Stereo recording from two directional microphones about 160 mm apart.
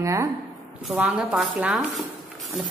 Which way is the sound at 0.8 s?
5° right (ahead or behind).